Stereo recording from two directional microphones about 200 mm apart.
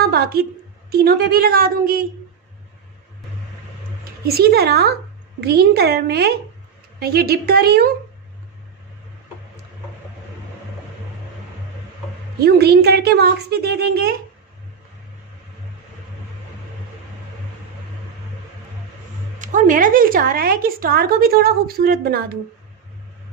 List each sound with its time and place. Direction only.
0.9 s a woman's voice: 50° right (ahead or behind)
4.3 s a woman's voice: 50° right (ahead or behind)
12.4 s a woman's voice: 55° right (ahead or behind)
19.4 s a woman's voice: 40° right (ahead or behind)